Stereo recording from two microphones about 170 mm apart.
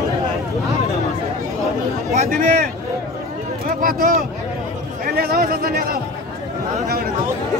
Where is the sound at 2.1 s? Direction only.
40° right (ahead or behind).